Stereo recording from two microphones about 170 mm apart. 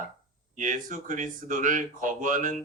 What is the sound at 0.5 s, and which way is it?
Speech, 50° right (ahead or behind).